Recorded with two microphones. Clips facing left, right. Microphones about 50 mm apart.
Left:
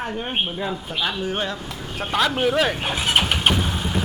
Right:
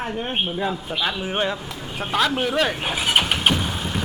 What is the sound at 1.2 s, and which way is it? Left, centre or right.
Speech, centre.